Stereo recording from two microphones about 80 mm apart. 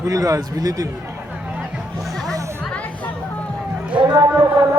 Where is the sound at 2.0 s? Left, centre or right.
Centre.